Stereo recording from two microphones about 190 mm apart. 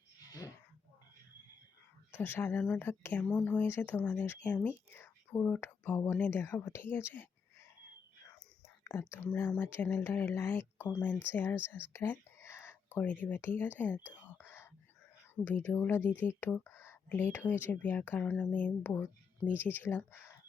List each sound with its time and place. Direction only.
0.3 s a sound: 20° left (ahead or behind)
2.1 s speech: 10° left (ahead or behind)
8.6 s speech: 15° left (ahead or behind)
14.2 s whispering: 10° left (ahead or behind)
15.4 s speech: 10° left (ahead or behind)